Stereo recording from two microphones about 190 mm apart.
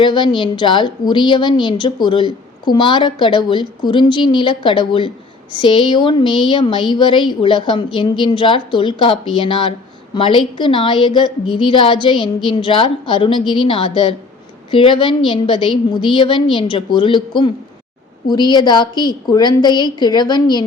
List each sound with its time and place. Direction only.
0.0 s a woman's voice: 25° left (ahead or behind)